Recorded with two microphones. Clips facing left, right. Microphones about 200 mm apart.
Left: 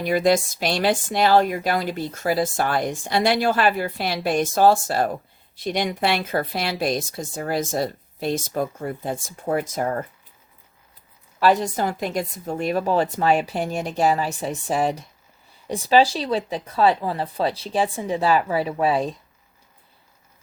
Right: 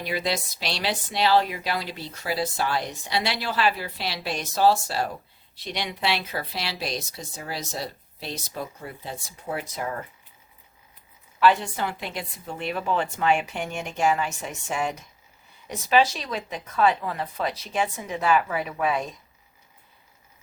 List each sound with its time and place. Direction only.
0.0 s speech: 50° left (ahead or behind)
11.3 s a woman's voice: 40° left (ahead or behind)